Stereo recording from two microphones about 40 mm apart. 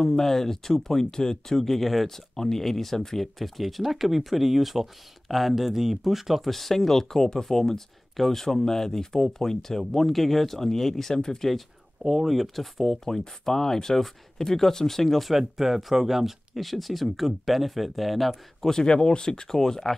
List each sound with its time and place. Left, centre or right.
0.0 s speech: centre
6.5 s speech: centre
11.1 s speech: centre
12.0 s speech: centre
13.0 s speech: centre
18.7 s speech: centre